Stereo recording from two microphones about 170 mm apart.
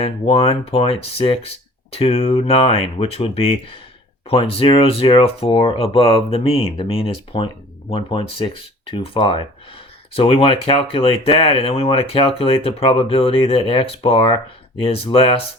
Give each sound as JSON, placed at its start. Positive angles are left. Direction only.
{"t": 0.0, "sound": "speech", "side_deg": 35}